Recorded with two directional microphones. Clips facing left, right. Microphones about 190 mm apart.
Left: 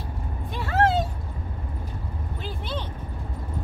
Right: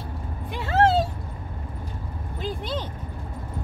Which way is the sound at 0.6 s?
25° right (ahead or behind).